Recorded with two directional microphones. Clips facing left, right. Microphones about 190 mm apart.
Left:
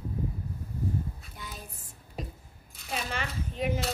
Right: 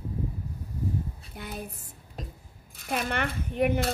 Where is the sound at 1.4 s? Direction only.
60° right (ahead or behind).